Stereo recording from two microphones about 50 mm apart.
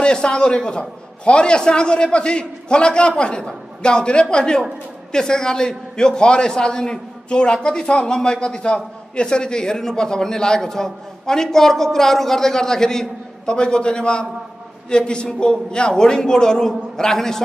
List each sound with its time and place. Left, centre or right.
0.0 s a man's voice: centre